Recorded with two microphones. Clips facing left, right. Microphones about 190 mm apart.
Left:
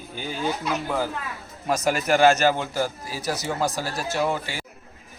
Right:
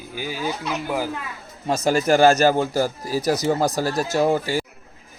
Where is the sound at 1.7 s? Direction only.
30° right (ahead or behind).